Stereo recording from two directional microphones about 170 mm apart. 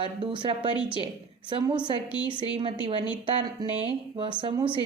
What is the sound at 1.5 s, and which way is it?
Speech, 25° right (ahead or behind).